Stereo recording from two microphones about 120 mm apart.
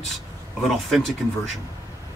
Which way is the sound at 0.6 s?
Centre (ahead or behind).